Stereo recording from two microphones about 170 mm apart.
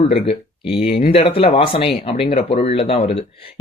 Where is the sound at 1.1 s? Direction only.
35° left (ahead or behind).